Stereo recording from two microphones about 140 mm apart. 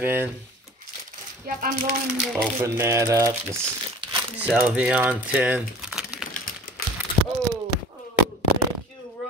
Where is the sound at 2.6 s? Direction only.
20° right (ahead or behind).